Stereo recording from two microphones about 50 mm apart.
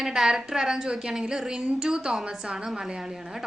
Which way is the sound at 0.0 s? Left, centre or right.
Centre.